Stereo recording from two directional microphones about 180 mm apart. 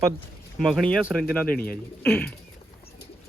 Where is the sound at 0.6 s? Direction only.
5° left (ahead or behind).